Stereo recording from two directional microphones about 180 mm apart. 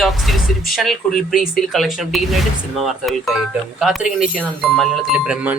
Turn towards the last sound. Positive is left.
turn(degrees=-5)  # may be behind; listen again after turning